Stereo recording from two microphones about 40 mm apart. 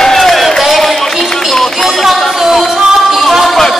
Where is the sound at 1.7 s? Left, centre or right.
Centre.